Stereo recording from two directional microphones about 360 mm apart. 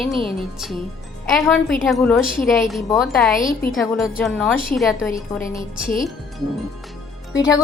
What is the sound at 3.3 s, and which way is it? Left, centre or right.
Speech, left.